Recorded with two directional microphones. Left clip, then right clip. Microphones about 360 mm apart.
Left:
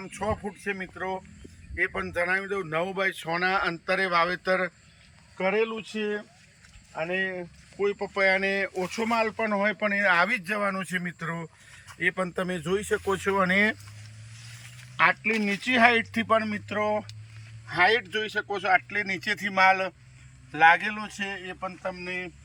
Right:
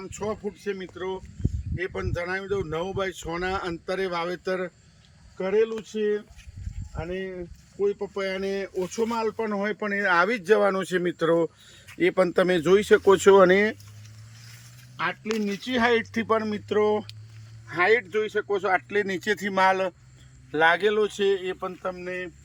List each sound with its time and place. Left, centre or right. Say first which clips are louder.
0.0 s speech: left 1 dB; centre; by 13.4 s right
13.4 s speech: right 4 dB; centre
14.9 s speech: left 5 dB; centre
15.4 s speech: left 3 dB; centre
17.7 s speech: right 1 dB; centre